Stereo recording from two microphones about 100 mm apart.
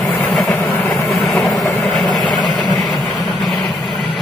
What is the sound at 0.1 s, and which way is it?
Vehicle, 15° left (ahead or behind).